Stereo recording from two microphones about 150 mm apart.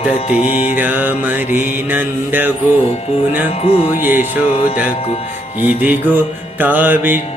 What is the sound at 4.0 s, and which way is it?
Mantra, 15° right (ahead or behind).